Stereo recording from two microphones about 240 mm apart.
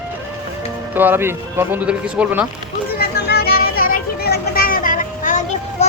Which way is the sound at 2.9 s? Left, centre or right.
Left.